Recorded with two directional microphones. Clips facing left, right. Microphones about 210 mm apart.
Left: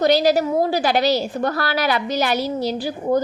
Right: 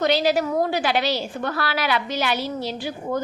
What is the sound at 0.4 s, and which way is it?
A woman's voice, 30° left (ahead or behind).